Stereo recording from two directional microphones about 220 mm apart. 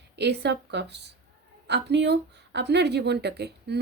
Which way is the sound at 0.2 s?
50° right (ahead or behind).